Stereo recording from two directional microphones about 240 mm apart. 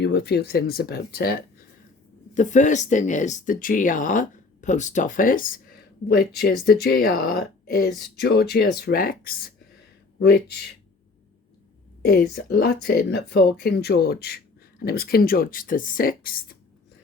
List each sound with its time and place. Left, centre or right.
0.0 s speech: left
12.3 s speech: left